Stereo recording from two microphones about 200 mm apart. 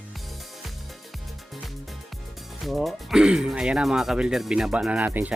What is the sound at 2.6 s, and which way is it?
Speech, centre (ahead or behind).